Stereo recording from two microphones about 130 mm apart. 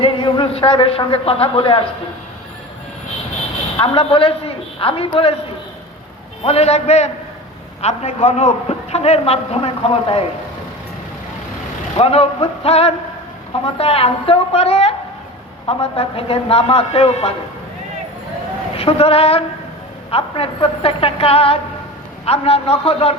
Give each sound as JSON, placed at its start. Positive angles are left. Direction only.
{"t": 0.0, "sound": "a man's voice", "side_deg": 40}
{"t": 3.9, "sound": "a man's voice", "side_deg": 45}
{"t": 6.4, "sound": "a man's voice", "side_deg": 50}
{"t": 11.9, "sound": "a man's voice", "side_deg": 50}
{"t": 18.8, "sound": "a man's voice", "side_deg": 50}